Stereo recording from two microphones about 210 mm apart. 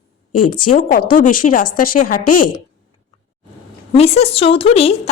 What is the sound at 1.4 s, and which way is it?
Speech, 40° left (ahead or behind).